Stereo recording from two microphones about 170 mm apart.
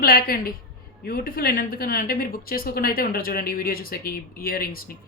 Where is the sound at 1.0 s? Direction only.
60° left (ahead or behind).